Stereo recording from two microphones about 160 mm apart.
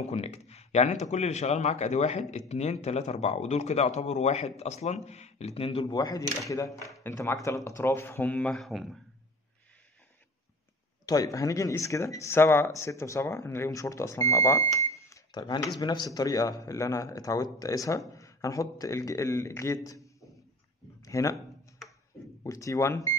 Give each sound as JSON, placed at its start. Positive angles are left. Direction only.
{"t": 0.0, "sound": "speech", "side_deg": 40}
{"t": 11.1, "sound": "speech", "side_deg": 20}
{"t": 21.0, "sound": "speech", "side_deg": 20}
{"t": 22.4, "sound": "speech", "side_deg": 20}